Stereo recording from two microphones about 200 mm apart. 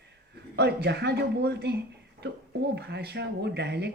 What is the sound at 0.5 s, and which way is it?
Speech, 55° right (ahead or behind).